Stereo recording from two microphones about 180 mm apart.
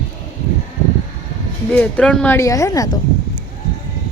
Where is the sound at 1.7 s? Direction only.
5° left (ahead or behind).